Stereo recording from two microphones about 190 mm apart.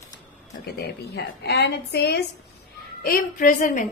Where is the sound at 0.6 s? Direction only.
60° left (ahead or behind).